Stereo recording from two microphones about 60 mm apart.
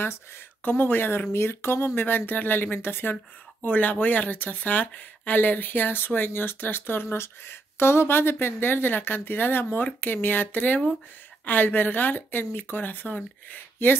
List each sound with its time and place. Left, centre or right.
0.7 s speech: left
2.0 s speech: left
3.6 s speech: left